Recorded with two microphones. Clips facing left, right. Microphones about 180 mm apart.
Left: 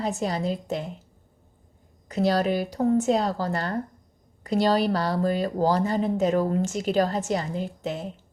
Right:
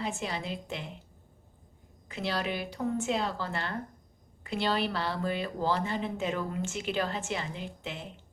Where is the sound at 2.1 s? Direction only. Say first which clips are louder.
Left 10 dB; 40° left (ahead or behind).